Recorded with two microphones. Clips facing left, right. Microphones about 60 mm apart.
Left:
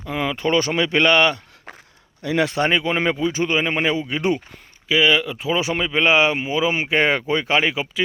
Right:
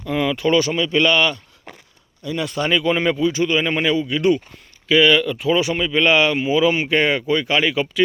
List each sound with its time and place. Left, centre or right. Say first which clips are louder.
0.1 s a sound: right 3 dB; left
0.7 s speech: even; left
2.2 s speech: left 4 dB; left
2.5 s speech: left 2 dB; left
2.7 s speech: right 2 dB; left
4.9 s speech: right 3 dB; centre